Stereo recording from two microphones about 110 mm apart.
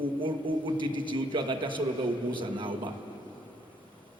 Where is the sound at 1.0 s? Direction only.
45° right (ahead or behind).